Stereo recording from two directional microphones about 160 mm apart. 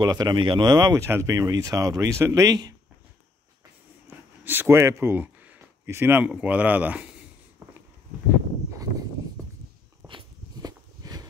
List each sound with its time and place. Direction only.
0.0 s speech: 25° right (ahead or behind)
4.1 s a sound: 15° right (ahead or behind)
4.5 s speech: 15° right (ahead or behind)
10.0 s walk: 25° right (ahead or behind)